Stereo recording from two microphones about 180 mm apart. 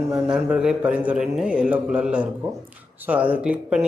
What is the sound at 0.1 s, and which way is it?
A man's voice, 5° right (ahead or behind).